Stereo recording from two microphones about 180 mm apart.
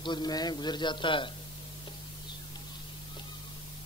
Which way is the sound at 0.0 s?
25° left (ahead or behind).